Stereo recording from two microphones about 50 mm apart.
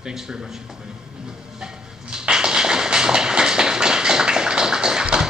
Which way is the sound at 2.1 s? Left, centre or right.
Centre.